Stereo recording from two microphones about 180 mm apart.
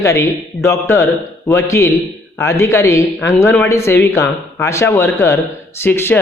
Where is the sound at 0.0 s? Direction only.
15° left (ahead or behind).